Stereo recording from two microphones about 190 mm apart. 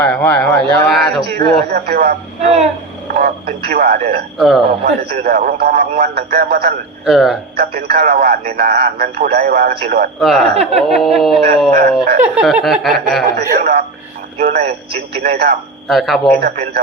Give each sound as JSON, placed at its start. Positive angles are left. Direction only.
{"t": 0.0, "sound": "speech", "side_deg": 5}
{"t": 1.2, "sound": "speech", "side_deg": -55}
{"t": 2.4, "sound": "a sound", "side_deg": -35}
{"t": 3.1, "sound": "speech", "side_deg": -50}
{"t": 4.4, "sound": "speech", "side_deg": 0}
{"t": 4.8, "sound": "speech", "side_deg": -55}
{"t": 7.0, "sound": "speech", "side_deg": 0}
{"t": 7.5, "sound": "speech", "side_deg": -55}
{"t": 10.2, "sound": "speech", "side_deg": 0}
{"t": 10.5, "sound": "a sound", "side_deg": -35}
{"t": 10.8, "sound": "speech", "side_deg": 0}
{"t": 13.3, "sound": "speech", "side_deg": -50}
{"t": 15.9, "sound": "speech", "side_deg": 0}
{"t": 16.4, "sound": "speech", "side_deg": -55}